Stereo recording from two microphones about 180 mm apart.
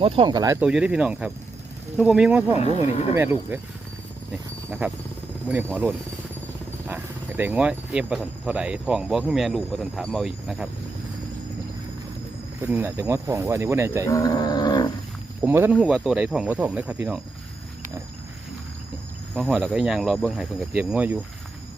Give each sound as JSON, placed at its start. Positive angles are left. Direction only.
{"t": 0.0, "sound": "speech", "side_deg": -25}
{"t": 0.6, "sound": "speech", "side_deg": -5}
{"t": 2.6, "sound": "speech", "side_deg": 35}
{"t": 3.2, "sound": "speech", "side_deg": -15}
{"t": 4.8, "sound": "speech", "side_deg": -10}
{"t": 6.8, "sound": "speech", "side_deg": -10}
{"t": 12.6, "sound": "speech", "side_deg": -10}
{"t": 14.1, "sound": "a sound", "side_deg": 20}
{"t": 15.4, "sound": "speech", "side_deg": -10}
{"t": 19.4, "sound": "speech", "side_deg": 0}